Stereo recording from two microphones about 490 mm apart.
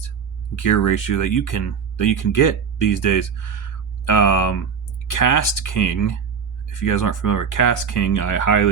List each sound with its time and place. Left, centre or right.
0.5 s speech: left